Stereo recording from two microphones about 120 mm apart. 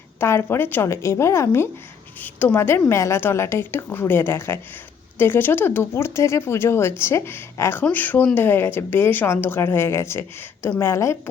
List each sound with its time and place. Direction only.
0.2 s a woman's voice: 20° left (ahead or behind)